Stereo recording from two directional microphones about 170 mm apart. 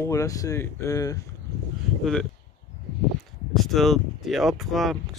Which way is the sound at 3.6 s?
Centre (ahead or behind).